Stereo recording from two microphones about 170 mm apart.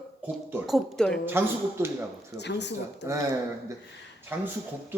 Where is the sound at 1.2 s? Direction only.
15° right (ahead or behind).